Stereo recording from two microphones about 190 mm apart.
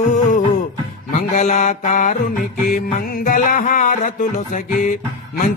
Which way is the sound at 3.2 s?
45° left (ahead or behind).